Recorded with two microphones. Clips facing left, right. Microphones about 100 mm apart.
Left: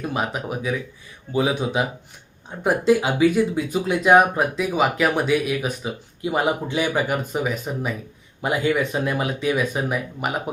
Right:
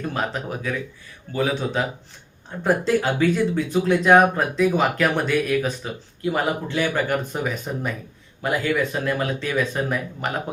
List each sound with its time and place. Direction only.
0.0 s speech: 10° left (ahead or behind)
8.4 s speech: 20° left (ahead or behind)